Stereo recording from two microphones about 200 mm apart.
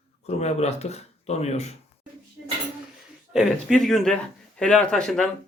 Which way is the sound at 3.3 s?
5° left (ahead or behind).